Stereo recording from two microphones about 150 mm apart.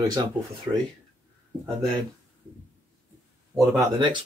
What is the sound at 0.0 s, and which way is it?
Speech, 25° right (ahead or behind).